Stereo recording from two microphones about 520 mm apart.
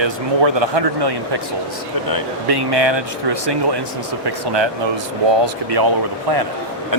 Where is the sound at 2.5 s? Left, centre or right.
Right.